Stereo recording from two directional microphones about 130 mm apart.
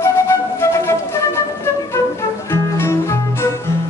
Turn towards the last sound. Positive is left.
turn(degrees=20)  # may be behind; listen again after turning